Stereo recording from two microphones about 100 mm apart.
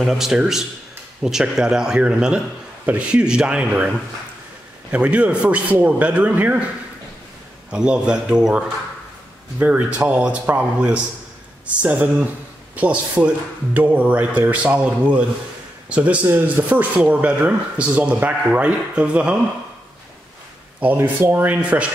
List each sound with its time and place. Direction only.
0.0 s a man's voice: 5° right (ahead or behind)
4.9 s speech: 10° right (ahead or behind)
7.7 s speech: 10° right (ahead or behind)
20.8 s speech: 20° right (ahead or behind)